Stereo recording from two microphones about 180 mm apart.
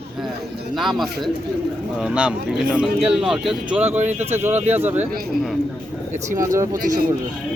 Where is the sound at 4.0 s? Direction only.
40° right (ahead or behind).